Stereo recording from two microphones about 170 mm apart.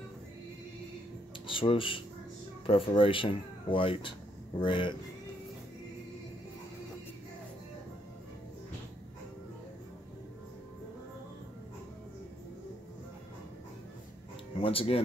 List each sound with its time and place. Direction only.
1.5 s speech: 30° left (ahead or behind)
14.5 s speech: 30° left (ahead or behind)